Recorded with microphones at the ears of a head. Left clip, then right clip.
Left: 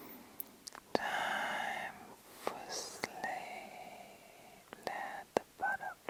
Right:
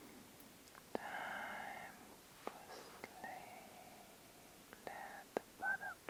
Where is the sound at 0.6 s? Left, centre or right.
Left.